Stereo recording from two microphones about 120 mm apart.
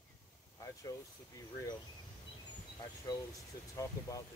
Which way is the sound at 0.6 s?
30° left (ahead or behind).